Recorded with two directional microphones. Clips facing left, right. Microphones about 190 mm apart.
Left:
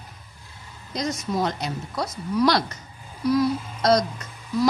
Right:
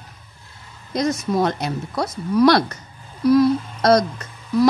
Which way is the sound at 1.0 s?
60° right (ahead or behind).